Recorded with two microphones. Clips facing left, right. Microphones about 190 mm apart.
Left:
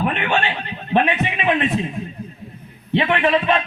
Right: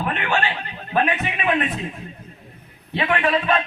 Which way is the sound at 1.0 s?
25° left (ahead or behind).